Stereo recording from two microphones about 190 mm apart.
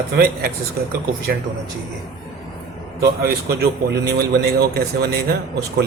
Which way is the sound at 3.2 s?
55° right (ahead or behind).